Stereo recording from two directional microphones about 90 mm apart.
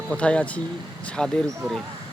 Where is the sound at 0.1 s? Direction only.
15° left (ahead or behind).